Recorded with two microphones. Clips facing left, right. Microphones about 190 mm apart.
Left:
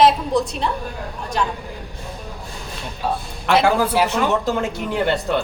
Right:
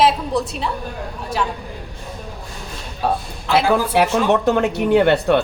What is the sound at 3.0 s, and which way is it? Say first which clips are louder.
Speech: right 2 dB; 65° right (ahead or behind).